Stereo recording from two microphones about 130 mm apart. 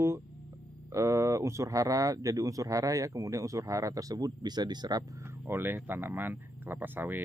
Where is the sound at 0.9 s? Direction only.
25° right (ahead or behind).